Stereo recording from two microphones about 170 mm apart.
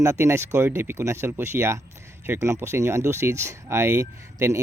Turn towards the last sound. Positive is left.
turn(degrees=-15)  # may be behind; listen again after turning